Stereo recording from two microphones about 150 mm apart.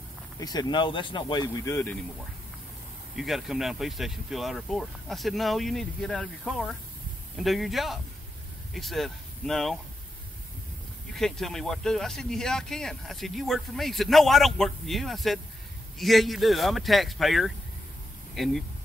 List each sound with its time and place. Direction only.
0.4 s speech: 25° left (ahead or behind)
3.2 s speech: centre (ahead or behind)
11.1 s speech: 5° left (ahead or behind)